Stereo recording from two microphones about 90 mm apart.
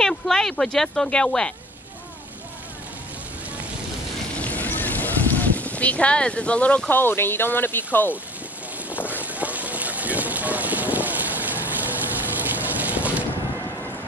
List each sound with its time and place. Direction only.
0.0 s speech: 5° left (ahead or behind)
4.4 s speech: 15° left (ahead or behind)
8.8 s boat: 15° right (ahead or behind)